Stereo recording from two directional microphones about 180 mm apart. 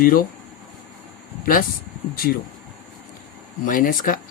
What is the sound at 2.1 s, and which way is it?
Speech, 55° left (ahead or behind).